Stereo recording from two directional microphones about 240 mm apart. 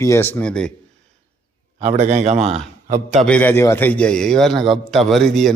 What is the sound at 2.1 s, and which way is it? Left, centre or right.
Speech, right.